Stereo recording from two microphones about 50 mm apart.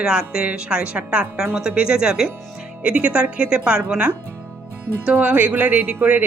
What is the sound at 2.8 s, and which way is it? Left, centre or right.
Speech, right.